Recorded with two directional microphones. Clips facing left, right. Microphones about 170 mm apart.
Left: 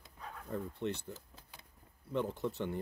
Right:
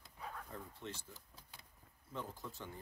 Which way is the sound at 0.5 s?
60° left (ahead or behind).